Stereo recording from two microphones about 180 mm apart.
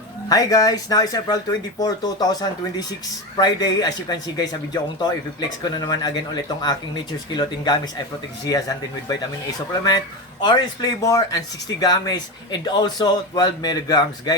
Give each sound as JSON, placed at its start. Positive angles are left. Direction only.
{"t": 0.3, "sound": "speech", "side_deg": 20}
{"t": 10.4, "sound": "speech", "side_deg": 25}